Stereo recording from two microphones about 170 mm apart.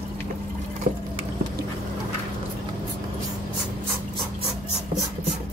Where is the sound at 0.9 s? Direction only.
55° right (ahead or behind).